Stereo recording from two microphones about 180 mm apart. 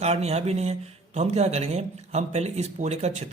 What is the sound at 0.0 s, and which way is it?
A man's voice, 35° right (ahead or behind).